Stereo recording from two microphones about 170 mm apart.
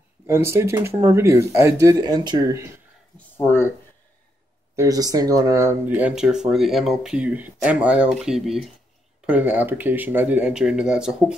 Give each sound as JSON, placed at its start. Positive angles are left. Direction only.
{"t": 0.3, "sound": "speech", "side_deg": -15}
{"t": 3.2, "sound": "speech", "side_deg": 15}
{"t": 4.7, "sound": "speech", "side_deg": -20}